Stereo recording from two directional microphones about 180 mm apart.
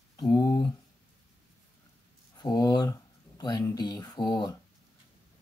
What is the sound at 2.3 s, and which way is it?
Speech, 25° left (ahead or behind).